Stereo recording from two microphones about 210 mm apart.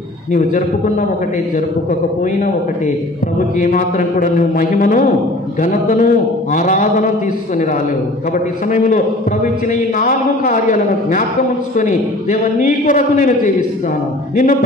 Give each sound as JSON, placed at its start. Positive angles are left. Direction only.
{"t": 3.3, "sound": "a man's voice", "side_deg": 40}
{"t": 8.7, "sound": "a man's voice", "side_deg": 40}
{"t": 14.3, "sound": "music", "side_deg": 40}